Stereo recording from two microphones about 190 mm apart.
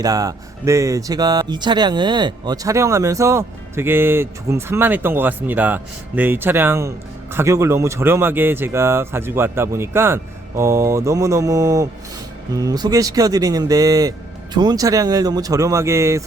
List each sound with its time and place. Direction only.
0.0 s speech: 20° right (ahead or behind)